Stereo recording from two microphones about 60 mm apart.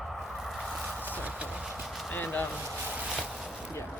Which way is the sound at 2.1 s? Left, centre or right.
Left.